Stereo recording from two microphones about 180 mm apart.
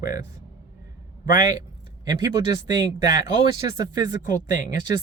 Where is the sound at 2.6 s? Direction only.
20° right (ahead or behind).